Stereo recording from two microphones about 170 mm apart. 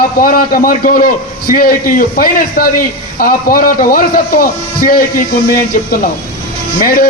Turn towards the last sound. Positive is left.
turn(degrees=55)  # may be behind; listen again after turning